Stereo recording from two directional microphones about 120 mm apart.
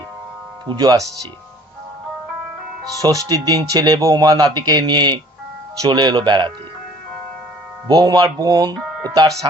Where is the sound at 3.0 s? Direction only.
30° right (ahead or behind).